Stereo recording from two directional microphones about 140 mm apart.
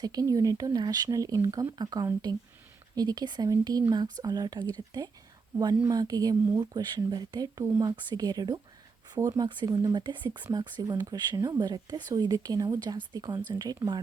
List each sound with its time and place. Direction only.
0.0 s speech: 25° right (ahead or behind)